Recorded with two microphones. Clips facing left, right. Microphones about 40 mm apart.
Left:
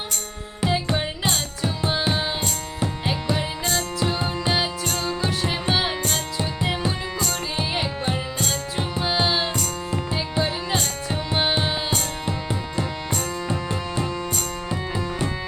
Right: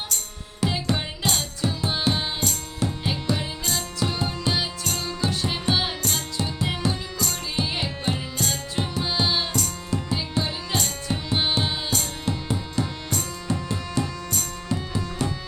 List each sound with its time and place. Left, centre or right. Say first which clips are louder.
0.6 s music: left 2 dB; centre
2.4 s music: left 1 dB; centre
4.9 s music: left 3 dB; left
5.3 s music: right 1 dB; centre
13.5 s music: left 1 dB; left